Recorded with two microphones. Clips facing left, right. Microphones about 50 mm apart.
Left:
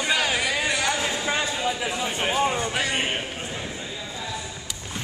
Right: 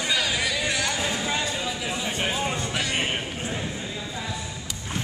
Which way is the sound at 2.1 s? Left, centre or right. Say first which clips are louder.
Left 4 dB; centre.